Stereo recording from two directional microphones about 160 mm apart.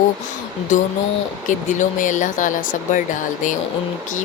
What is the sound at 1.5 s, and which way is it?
Speech, 55° left (ahead or behind).